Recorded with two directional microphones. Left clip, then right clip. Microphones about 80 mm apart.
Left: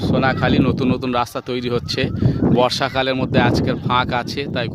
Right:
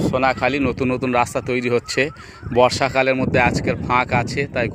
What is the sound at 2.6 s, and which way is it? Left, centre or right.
Speech, left.